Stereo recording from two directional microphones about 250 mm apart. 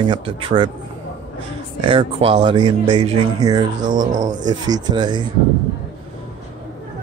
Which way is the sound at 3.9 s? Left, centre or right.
Right.